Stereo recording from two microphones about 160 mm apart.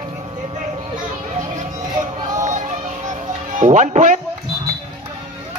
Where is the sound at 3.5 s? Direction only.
50° right (ahead or behind).